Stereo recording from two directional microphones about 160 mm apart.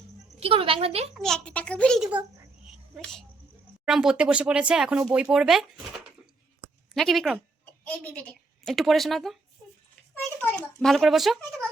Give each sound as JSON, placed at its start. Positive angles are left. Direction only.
{"t": 0.3, "sound": "speech", "side_deg": -35}
{"t": 1.1, "sound": "a child's voice", "side_deg": 5}
{"t": 3.0, "sound": "speech", "side_deg": 5}
{"t": 6.9, "sound": "speech", "side_deg": 0}